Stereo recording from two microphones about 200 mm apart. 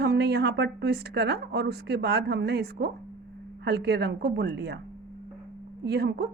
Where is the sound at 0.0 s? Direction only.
55° right (ahead or behind).